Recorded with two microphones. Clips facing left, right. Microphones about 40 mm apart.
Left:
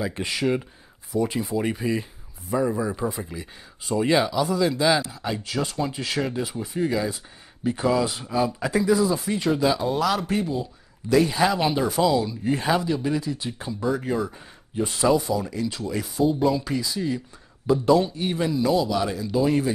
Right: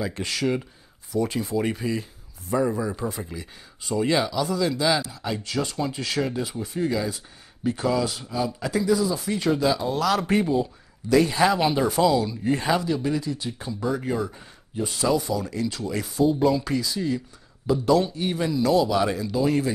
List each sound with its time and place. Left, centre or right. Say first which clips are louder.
0.1 s speech: left 1 dB; centre
9.2 s speech: even; centre
10.2 s speech: right 4 dB; centre
13.7 s speech: left 1 dB; centre
18.7 s speech: right 5 dB; centre
19.3 s speech: left 3 dB; centre